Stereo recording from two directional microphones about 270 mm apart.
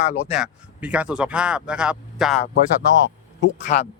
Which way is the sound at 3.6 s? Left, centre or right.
Left.